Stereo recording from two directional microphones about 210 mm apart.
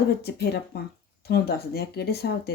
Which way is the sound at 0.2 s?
50° left (ahead or behind).